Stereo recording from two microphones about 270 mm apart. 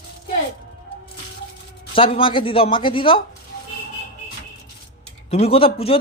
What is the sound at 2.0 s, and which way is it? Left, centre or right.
Speech, centre.